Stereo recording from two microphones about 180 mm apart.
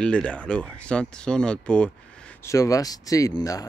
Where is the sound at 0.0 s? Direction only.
5° left (ahead or behind).